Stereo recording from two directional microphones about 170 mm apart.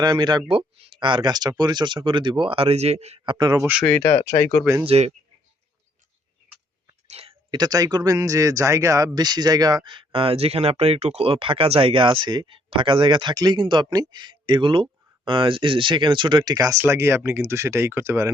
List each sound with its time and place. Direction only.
0.0 s speech: 25° right (ahead or behind)
3.3 s speech: 20° right (ahead or behind)
3.8 s speech: 10° left (ahead or behind)
4.6 s speech: 15° right (ahead or behind)
4.9 s speech: 40° right (ahead or behind)
7.1 s a sound: 35° right (ahead or behind)
7.5 s speech: 20° right (ahead or behind)